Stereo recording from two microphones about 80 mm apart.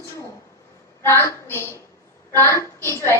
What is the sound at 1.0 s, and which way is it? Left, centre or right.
A woman's voice, left.